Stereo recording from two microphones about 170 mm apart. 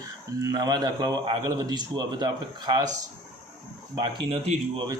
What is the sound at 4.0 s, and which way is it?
Speech, 30° right (ahead or behind).